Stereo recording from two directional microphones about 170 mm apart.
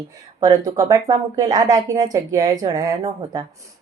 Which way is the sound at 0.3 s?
20° right (ahead or behind).